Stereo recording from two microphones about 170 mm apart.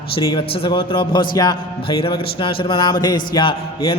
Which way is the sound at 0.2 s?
30° left (ahead or behind).